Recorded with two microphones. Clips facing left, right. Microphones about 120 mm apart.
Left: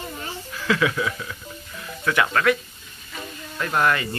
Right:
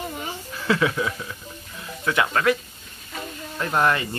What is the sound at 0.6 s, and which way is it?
Speech, 30° right (ahead or behind).